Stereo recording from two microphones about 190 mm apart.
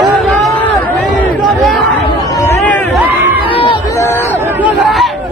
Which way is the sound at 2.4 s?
10° left (ahead or behind).